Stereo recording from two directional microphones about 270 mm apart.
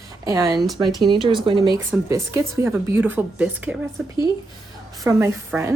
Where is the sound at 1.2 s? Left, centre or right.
Centre.